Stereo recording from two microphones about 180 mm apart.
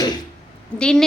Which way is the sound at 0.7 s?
5° left (ahead or behind).